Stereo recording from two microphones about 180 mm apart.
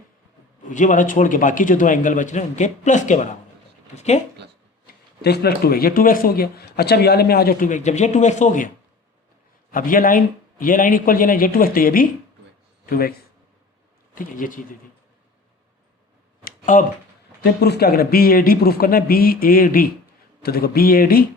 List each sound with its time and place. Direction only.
0.7 s a man's voice: 45° left (ahead or behind)
4.9 s speech: 60° left (ahead or behind); by 8.7 s 45° left (ahead or behind)
9.7 s a man's voice: 50° left (ahead or behind)
14.2 s a man's voice: 50° left (ahead or behind)
16.4 s a sound: 50° left (ahead or behind)
17.4 s speech: 65° left (ahead or behind)